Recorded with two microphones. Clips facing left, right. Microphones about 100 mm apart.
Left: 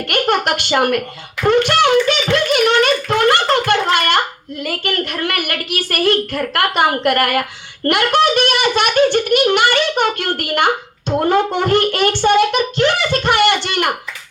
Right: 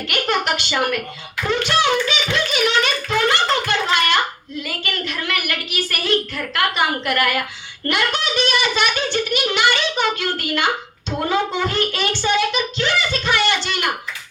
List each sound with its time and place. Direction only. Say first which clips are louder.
0.1 s a woman's voice: left 4 dB; 55° left (ahead or behind)